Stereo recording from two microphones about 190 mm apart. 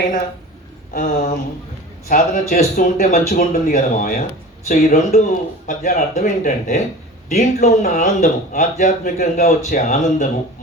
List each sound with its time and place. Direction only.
0.9 s speech: 50° left (ahead or behind)